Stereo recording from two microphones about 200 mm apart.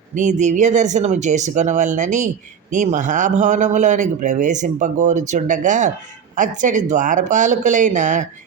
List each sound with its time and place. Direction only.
0.1 s speech: 35° right (ahead or behind)